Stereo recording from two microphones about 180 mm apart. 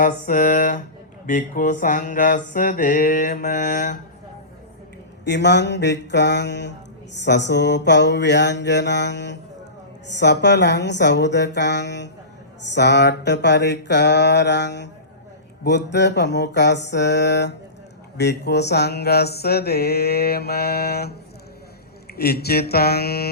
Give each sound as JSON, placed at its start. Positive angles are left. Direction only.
{"t": 0.0, "sound": "mantra", "side_deg": 50}
{"t": 5.2, "sound": "mantra", "side_deg": 70}
{"t": 22.1, "sound": "mantra", "side_deg": 60}